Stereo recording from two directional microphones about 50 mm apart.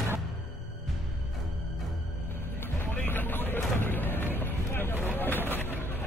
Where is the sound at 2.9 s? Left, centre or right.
Left.